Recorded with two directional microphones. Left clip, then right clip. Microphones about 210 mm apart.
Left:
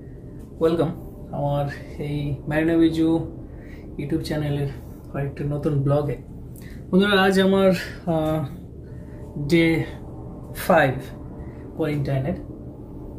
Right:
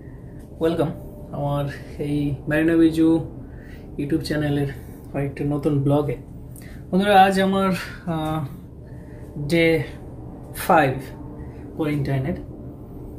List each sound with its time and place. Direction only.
0.6 s speech: 5° left (ahead or behind)
9.5 s speech: centre (ahead or behind)